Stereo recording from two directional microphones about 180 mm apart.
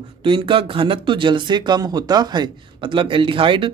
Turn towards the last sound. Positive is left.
turn(degrees=-30)  # may be behind; listen again after turning